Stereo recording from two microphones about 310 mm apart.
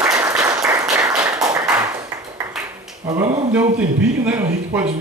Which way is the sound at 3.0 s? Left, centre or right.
Centre.